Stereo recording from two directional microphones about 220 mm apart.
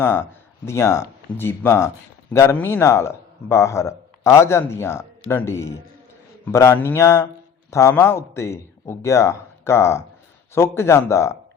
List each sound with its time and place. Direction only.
0.0 s a man's voice: 10° left (ahead or behind)